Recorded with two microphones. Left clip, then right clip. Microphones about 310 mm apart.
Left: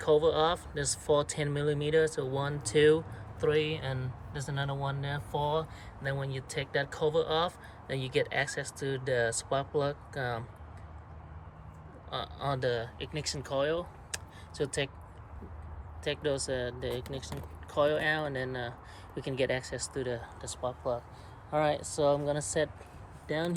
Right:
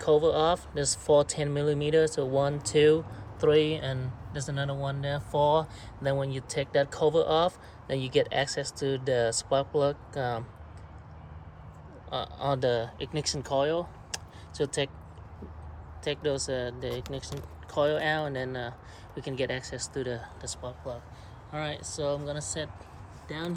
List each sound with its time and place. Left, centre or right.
0.0 s speech: centre
12.1 s speech: centre
16.0 s speech: centre